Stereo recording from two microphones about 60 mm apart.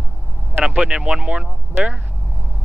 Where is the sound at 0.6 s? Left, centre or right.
Centre.